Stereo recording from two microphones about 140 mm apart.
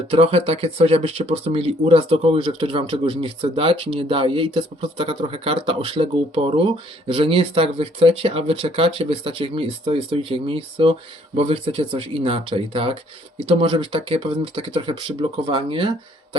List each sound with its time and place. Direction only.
0.1 s speech: 40° right (ahead or behind)